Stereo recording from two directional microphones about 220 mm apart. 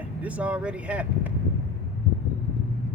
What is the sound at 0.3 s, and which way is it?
Speech, 5° right (ahead or behind).